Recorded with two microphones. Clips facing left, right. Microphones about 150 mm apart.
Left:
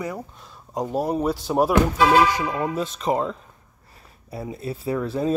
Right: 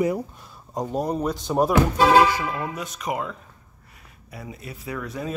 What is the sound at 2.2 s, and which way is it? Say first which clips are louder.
Speech: left 1 dB; 15° left (ahead or behind).